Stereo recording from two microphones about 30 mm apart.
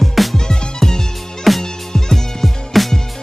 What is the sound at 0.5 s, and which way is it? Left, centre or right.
Music, centre.